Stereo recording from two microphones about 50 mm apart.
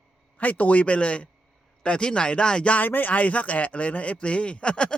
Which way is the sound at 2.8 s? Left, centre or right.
Left.